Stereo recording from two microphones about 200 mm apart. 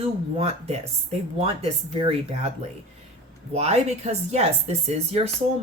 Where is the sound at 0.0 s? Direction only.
30° right (ahead or behind).